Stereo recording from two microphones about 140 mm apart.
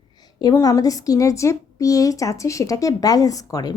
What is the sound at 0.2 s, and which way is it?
A woman's voice, 30° left (ahead or behind).